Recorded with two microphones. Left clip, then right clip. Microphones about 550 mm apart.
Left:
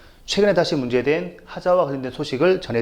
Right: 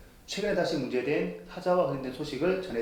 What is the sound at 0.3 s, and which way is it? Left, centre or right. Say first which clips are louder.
Speech: left 11 dB; left.